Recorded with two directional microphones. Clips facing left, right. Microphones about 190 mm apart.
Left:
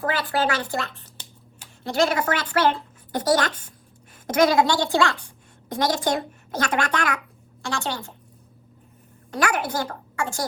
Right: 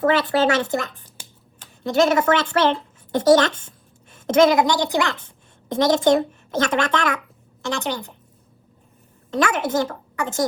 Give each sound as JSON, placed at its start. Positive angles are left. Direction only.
{"t": 0.0, "sound": "a woman's voice", "side_deg": -25}
{"t": 9.3, "sound": "a woman's voice", "side_deg": -25}